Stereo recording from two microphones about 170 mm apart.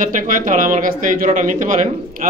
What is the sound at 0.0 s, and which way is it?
A man's voice, 50° right (ahead or behind).